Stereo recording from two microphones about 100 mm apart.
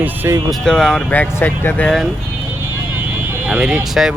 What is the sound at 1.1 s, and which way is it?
Speech, 20° left (ahead or behind).